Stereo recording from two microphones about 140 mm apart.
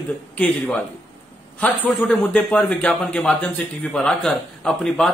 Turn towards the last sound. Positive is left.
turn(degrees=5)  # may be behind; listen again after turning